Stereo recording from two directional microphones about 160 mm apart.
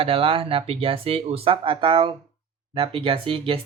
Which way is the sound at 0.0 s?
35° right (ahead or behind).